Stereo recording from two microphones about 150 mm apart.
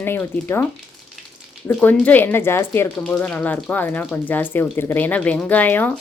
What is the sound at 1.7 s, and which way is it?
Speech, 10° left (ahead or behind).